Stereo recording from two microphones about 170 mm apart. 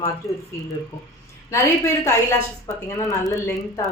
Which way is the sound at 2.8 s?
20° left (ahead or behind).